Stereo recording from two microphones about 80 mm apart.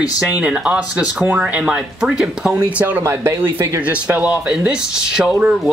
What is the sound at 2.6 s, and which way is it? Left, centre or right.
Speech, right.